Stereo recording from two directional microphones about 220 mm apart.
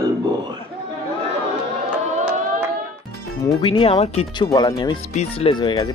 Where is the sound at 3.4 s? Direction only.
20° left (ahead or behind).